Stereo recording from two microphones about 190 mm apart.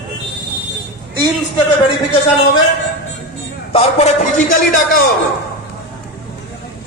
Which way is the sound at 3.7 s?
35° left (ahead or behind).